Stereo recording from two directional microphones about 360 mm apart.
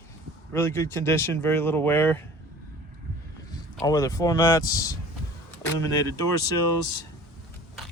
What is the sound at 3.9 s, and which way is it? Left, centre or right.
Speech, centre.